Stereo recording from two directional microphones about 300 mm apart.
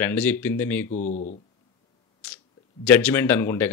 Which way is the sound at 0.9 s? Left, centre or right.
Left.